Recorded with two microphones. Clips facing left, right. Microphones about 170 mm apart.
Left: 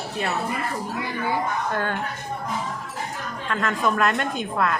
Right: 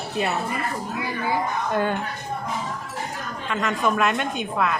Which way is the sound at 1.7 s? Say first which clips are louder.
Right 3 dB; 10° right (ahead or behind).